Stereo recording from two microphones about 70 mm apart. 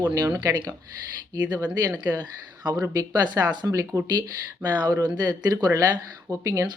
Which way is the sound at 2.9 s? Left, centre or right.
Right.